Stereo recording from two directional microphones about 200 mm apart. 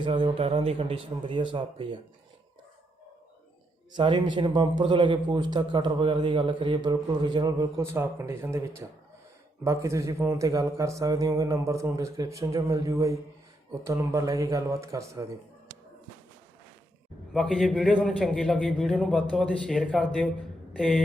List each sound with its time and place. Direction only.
0.0 s speech: 25° right (ahead or behind)
3.9 s a man's voice: 25° right (ahead or behind)
17.3 s a man's voice: 5° left (ahead or behind)